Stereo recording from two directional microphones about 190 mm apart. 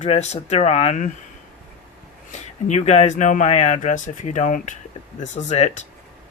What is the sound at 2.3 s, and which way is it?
Speech, 35° left (ahead or behind).